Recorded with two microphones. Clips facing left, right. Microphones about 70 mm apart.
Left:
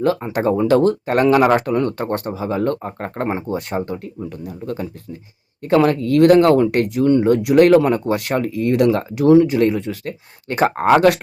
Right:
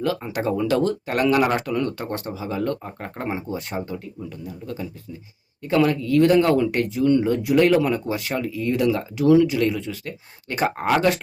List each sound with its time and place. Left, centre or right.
0.0 s speech: left